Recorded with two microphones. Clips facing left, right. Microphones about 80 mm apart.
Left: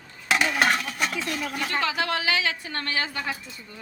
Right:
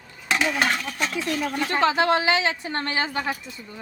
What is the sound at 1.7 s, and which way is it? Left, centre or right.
A woman's voice, right.